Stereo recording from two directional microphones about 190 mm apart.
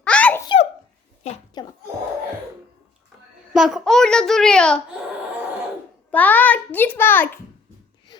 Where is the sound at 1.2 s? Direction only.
35° left (ahead or behind).